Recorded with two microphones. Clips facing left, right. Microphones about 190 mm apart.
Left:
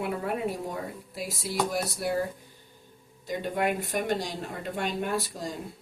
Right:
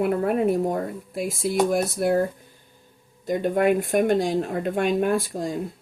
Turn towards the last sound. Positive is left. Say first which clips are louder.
# right 7 dB
turn(degrees=-50)  # may be behind; listen again after turning